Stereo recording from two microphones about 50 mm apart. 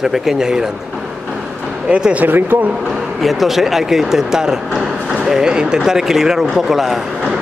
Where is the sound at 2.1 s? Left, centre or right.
Right.